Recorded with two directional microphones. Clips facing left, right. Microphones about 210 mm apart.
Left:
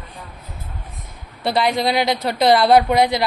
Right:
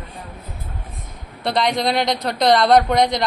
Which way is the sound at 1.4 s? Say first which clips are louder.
Left 1 dB; 5° left (ahead or behind).